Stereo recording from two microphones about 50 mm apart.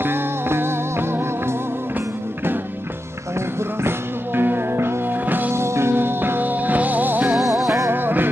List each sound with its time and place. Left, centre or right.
0.0 s music: right
3.8 s music: right
5.5 s music: right
7.3 s music: centre
7.9 s music: right